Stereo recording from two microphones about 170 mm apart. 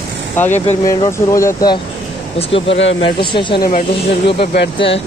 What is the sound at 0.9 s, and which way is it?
Speech, 20° left (ahead or behind).